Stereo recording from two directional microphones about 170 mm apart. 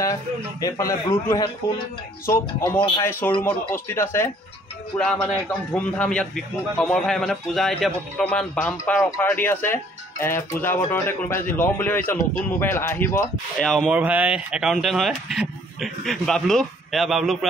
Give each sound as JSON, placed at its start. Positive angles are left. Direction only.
{"t": 0.0, "sound": "a man's voice", "side_deg": 20}
{"t": 13.6, "sound": "speech", "side_deg": 0}